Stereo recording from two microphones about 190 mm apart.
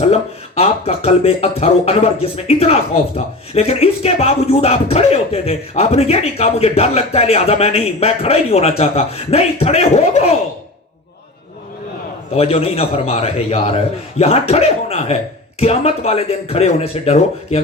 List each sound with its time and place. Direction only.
0.0 s speech: 35° left (ahead or behind)
12.3 s speech: 30° left (ahead or behind)